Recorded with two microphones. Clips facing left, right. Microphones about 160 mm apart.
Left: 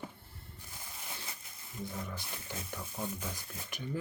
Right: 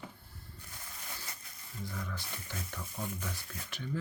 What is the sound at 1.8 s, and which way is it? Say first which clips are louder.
Speech: left 1 dB; 25° left (ahead or behind).